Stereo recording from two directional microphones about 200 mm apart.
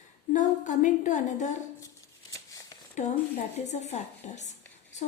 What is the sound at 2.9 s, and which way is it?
A woman's voice, 40° left (ahead or behind).